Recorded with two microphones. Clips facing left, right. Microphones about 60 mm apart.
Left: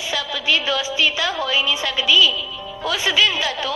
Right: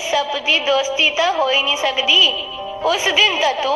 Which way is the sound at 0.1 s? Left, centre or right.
Centre.